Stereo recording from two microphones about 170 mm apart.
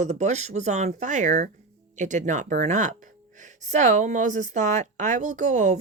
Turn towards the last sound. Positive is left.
turn(degrees=-45)  # may be behind; listen again after turning